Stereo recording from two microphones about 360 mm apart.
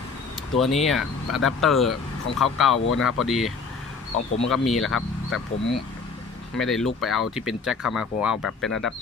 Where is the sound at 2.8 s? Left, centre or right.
Left.